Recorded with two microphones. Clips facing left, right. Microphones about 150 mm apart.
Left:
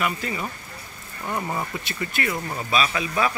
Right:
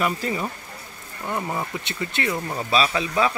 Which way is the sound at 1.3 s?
5° right (ahead or behind).